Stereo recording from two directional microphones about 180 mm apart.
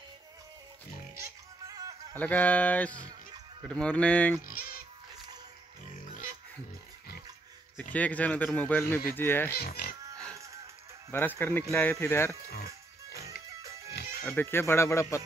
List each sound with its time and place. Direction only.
1.7 s music: 20° right (ahead or behind)
2.1 s a man's voice: 10° left (ahead or behind)
7.7 s a man's voice: 10° left (ahead or behind)
9.5 s speech: 60° left (ahead or behind)
10.3 s music: 15° right (ahead or behind)
11.1 s a man's voice: 10° left (ahead or behind)
12.4 s music: 60° left (ahead or behind)
14.2 s a man's voice: 10° left (ahead or behind)